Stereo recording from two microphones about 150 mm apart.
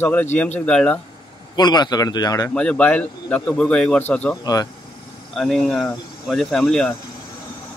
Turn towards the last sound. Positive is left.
turn(degrees=5)  # may be behind; listen again after turning